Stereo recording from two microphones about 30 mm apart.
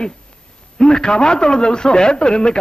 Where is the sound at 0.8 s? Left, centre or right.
Left.